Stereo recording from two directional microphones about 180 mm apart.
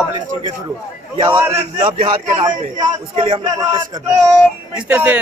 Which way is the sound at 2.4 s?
25° right (ahead or behind).